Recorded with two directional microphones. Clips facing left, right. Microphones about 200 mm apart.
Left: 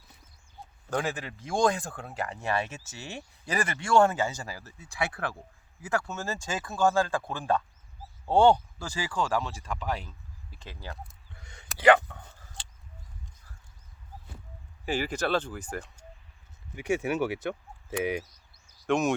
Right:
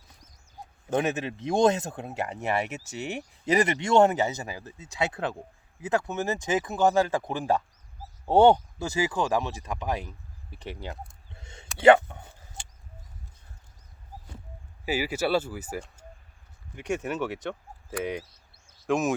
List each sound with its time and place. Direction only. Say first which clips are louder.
0.9 s speech: right 5 dB; 20° right (ahead or behind)
11.3 s a sound: right 4 dB; 25° right (ahead or behind)
14.8 s speech: right 2 dB; 5° right (ahead or behind)
16.7 s speech: left 2 dB; 10° left (ahead or behind)
18.9 s speech: even; centre (ahead or behind)